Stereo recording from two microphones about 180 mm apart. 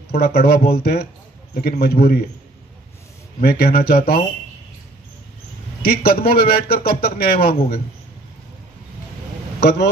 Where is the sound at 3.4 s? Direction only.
55° left (ahead or behind).